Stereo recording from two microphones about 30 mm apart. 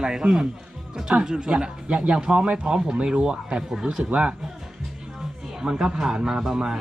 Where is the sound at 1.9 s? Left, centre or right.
Right.